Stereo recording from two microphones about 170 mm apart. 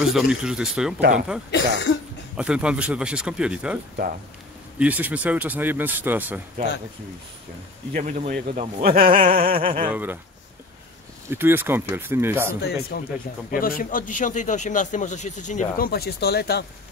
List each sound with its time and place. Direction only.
0.0 s a man's voice: 5° right (ahead or behind)
7.9 s speech: 50° right (ahead or behind)
9.6 s speech: 30° right (ahead or behind)
9.8 s a man's voice: 10° right (ahead or behind)
11.2 s a man's voice: 10° right (ahead or behind)
12.5 s speech: 70° left (ahead or behind)
13.5 s speech: 55° left (ahead or behind)
15.9 s speech: 70° left (ahead or behind)